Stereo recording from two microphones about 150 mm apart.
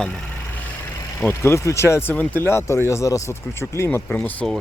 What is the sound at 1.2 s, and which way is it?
Speech, 15° left (ahead or behind).